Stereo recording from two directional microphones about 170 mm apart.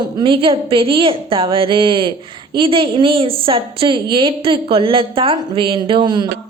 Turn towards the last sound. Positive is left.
turn(degrees=-25)  # may be behind; listen again after turning